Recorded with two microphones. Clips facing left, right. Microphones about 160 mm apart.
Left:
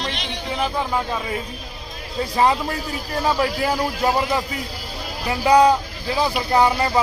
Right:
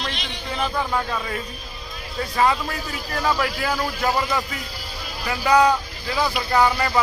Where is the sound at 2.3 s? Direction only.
30° left (ahead or behind).